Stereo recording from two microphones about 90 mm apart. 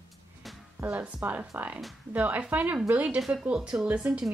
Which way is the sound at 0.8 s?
35° right (ahead or behind).